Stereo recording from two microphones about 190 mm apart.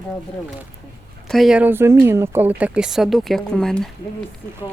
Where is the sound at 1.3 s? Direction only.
Centre (ahead or behind).